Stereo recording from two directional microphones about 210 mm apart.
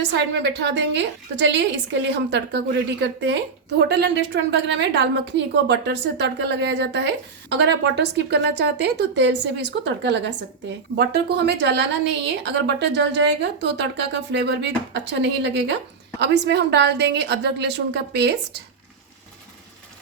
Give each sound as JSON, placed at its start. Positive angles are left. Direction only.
{"t": 0.2, "sound": "a woman's voice", "side_deg": -55}